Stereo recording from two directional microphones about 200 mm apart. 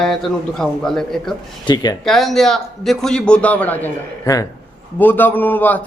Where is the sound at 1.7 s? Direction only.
20° left (ahead or behind).